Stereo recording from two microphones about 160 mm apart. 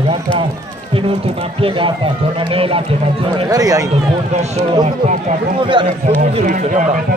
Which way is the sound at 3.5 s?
20° right (ahead or behind).